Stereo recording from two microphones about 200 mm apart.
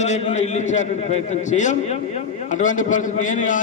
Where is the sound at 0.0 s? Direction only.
35° left (ahead or behind).